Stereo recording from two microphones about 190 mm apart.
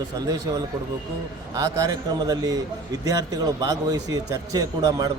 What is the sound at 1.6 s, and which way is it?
A man's voice, 20° right (ahead or behind).